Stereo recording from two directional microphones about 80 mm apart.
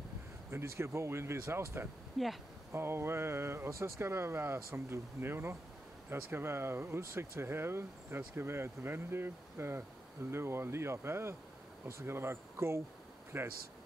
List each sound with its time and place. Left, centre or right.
0.5 s speech: right
2.2 s speech: centre
2.7 s speech: right